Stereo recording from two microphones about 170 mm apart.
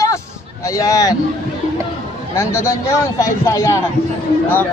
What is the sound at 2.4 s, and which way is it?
Speech, 15° left (ahead or behind).